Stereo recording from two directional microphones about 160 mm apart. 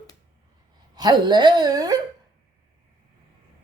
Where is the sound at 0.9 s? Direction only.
25° right (ahead or behind).